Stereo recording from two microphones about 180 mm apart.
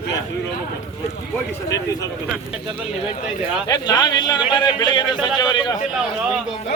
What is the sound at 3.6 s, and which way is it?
A man's voice, 20° left (ahead or behind).